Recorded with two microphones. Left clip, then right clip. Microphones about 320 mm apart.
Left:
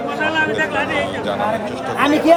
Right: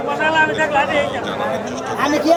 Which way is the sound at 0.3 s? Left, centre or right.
Right.